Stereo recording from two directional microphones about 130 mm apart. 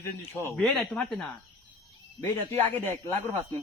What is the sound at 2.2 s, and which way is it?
Speech, 15° left (ahead or behind).